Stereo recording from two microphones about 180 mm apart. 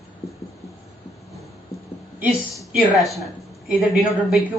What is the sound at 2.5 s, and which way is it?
A woman's voice, centre (ahead or behind).